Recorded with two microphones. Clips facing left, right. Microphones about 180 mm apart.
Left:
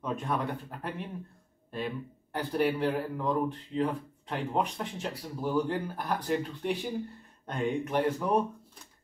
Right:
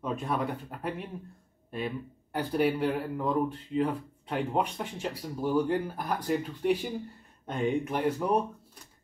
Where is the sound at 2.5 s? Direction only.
5° right (ahead or behind).